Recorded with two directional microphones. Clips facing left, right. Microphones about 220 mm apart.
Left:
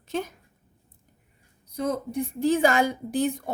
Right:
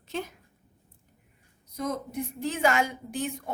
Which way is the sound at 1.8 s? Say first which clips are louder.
Left 4 dB; 30° left (ahead or behind).